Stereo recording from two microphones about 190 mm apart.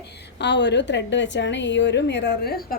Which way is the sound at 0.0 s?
65° left (ahead or behind).